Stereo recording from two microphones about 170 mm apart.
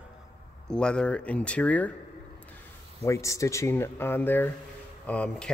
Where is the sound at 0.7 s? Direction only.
5° left (ahead or behind).